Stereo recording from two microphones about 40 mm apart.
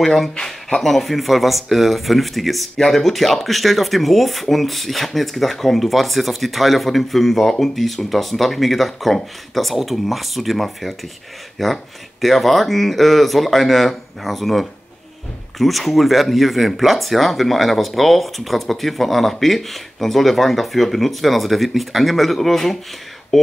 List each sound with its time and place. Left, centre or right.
0.0 s speech: centre
0.4 s a sound: centre
0.8 s speech: centre